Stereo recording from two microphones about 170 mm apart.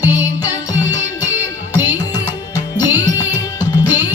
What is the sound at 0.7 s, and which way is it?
Music, 20° left (ahead or behind).